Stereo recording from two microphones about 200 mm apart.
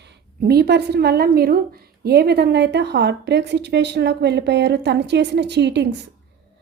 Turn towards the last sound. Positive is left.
turn(degrees=-60)  # may be behind; listen again after turning